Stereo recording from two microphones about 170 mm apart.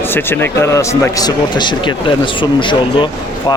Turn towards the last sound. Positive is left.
turn(degrees=30)  # may be behind; listen again after turning